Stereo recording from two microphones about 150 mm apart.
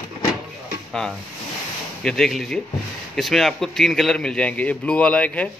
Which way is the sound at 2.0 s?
5° left (ahead or behind).